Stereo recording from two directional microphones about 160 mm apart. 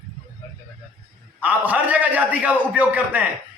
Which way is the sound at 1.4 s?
10° right (ahead or behind).